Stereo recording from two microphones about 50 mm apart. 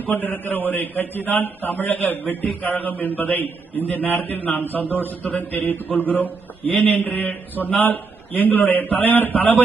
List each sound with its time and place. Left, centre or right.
0.0 s a man's voice: left